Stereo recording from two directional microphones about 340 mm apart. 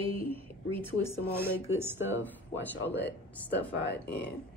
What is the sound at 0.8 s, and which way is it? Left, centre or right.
Speech, centre.